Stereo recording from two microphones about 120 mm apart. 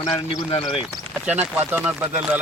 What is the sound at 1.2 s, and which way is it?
Speech, 15° right (ahead or behind).